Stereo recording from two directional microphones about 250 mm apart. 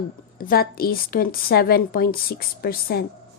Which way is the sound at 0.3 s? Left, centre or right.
Left.